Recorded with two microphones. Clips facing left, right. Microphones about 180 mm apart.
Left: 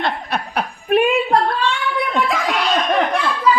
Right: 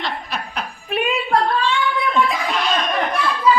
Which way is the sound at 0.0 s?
55° left (ahead or behind).